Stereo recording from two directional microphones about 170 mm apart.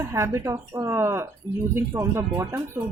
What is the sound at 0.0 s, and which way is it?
Speech, 15° right (ahead or behind).